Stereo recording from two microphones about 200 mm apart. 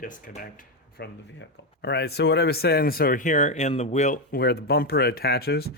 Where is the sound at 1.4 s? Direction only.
55° left (ahead or behind); by 4.4 s 35° left (ahead or behind).